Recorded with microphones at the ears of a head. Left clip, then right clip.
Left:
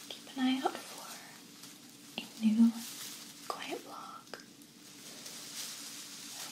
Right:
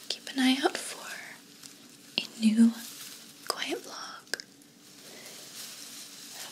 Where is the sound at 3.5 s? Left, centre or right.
Right.